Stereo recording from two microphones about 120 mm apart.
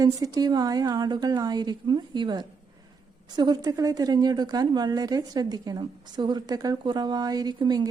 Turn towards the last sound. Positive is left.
turn(degrees=-35)  # may be behind; listen again after turning